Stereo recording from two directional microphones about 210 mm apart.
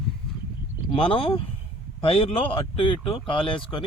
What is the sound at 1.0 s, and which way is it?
Speech, 25° left (ahead or behind).